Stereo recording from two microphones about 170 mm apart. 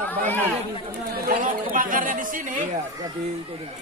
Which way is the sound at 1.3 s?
55° right (ahead or behind).